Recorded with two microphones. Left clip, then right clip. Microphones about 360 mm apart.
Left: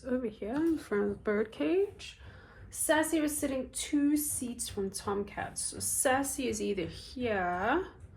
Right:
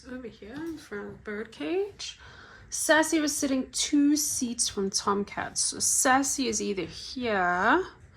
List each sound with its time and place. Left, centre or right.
0.1 s speech: centre
2.8 s a woman's voice: right